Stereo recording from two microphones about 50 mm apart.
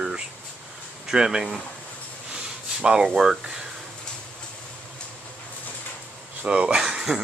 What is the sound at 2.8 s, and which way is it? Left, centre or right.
Speech, centre.